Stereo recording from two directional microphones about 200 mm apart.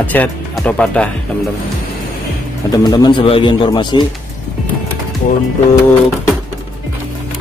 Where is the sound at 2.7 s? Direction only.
20° left (ahead or behind).